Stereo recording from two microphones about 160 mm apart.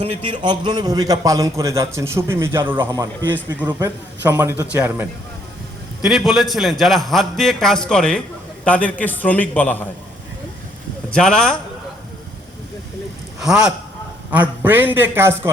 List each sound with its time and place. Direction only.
0.0 s a man's voice: 35° right (ahead or behind); by 5.0 s 15° right (ahead or behind)
6.0 s a man's voice: centre (ahead or behind)
11.1 s a man's voice: 5° left (ahead or behind)
13.4 s a man's voice: 5° right (ahead or behind)